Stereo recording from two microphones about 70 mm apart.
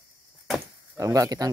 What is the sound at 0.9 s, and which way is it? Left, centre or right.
Speech, right.